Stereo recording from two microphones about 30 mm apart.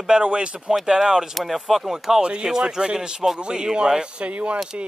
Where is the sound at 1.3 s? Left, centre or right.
Centre; by 4.3 s right.